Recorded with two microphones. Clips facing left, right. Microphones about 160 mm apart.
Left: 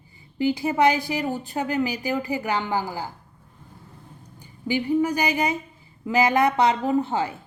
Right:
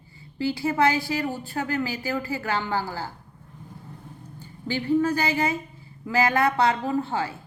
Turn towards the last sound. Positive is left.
turn(degrees=20)  # may be behind; listen again after turning